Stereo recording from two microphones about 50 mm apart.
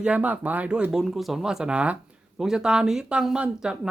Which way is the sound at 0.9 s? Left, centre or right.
Centre.